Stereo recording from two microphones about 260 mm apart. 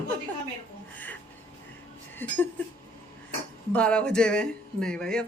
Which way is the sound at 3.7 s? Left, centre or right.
Centre.